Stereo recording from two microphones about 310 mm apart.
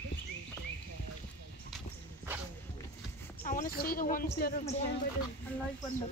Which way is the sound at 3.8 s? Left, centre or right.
Left.